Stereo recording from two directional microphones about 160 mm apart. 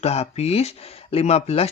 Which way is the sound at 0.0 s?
40° left (ahead or behind).